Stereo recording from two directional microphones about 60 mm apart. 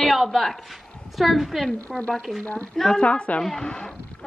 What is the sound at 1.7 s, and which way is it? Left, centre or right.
Speech, centre.